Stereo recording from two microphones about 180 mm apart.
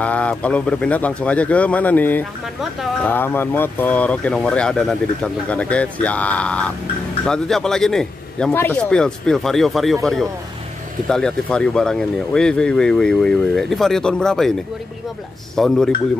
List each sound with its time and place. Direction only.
0.0 s speech: 5° left (ahead or behind)
2.6 s speech: centre (ahead or behind)
3.1 s speech: 10° left (ahead or behind)
11.1 s speech: 5° left (ahead or behind)
15.5 s speech: centre (ahead or behind)